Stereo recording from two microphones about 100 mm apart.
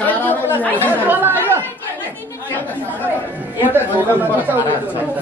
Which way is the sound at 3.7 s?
20° right (ahead or behind).